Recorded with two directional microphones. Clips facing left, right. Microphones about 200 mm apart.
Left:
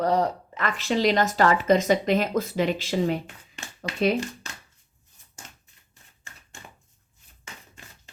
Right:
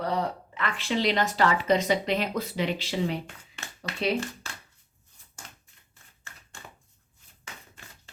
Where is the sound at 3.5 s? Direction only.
15° left (ahead or behind).